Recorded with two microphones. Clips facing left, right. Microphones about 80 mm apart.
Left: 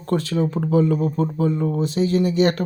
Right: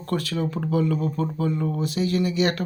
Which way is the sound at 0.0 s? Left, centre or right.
Left.